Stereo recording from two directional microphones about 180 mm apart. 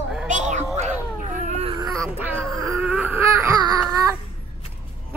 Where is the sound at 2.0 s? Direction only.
10° right (ahead or behind).